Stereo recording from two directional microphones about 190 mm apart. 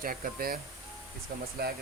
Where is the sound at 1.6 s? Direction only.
55° right (ahead or behind).